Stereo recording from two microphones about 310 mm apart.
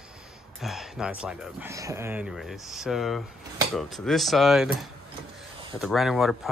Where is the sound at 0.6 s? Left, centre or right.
Centre.